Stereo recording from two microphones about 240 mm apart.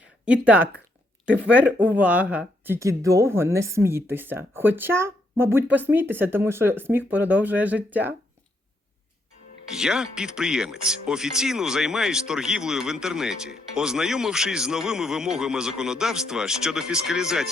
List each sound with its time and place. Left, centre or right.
0.3 s speech: centre
9.7 s speech: centre